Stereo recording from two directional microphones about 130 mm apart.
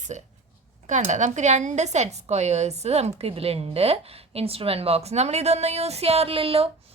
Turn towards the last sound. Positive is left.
turn(degrees=-45)  # may be behind; listen again after turning